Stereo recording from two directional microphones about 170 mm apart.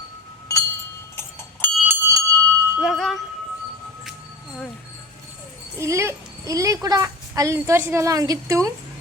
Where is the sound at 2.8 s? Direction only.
Centre (ahead or behind).